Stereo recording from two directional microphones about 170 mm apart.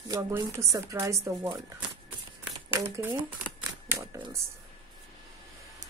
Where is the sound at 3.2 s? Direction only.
25° right (ahead or behind).